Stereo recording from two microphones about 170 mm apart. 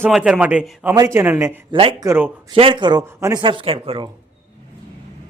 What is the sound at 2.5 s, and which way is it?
Speech, 30° right (ahead or behind).